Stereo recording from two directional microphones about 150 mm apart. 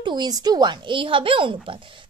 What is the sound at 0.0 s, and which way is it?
Speech, 30° right (ahead or behind).